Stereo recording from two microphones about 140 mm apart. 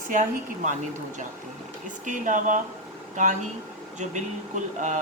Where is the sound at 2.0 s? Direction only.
65° right (ahead or behind).